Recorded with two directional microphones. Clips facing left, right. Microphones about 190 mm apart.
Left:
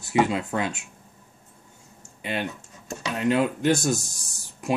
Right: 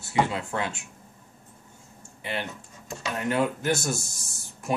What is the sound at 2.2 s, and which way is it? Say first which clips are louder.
Typing: left 3 dB; 20° left (ahead or behind).